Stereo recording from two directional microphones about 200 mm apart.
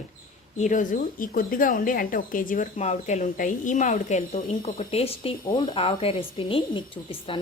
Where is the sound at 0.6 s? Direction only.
40° left (ahead or behind).